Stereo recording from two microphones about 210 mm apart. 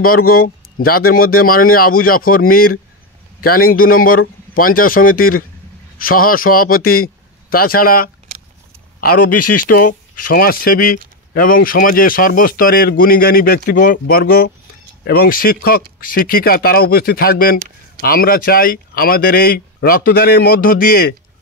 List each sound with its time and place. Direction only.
0.0 s a man's voice: 45° left (ahead or behind)
9.3 s speech: 90° left
10.1 s speech: 45° left (ahead or behind)
17.6 s a sound: 40° right (ahead or behind)
18.0 s speech: 45° left (ahead or behind)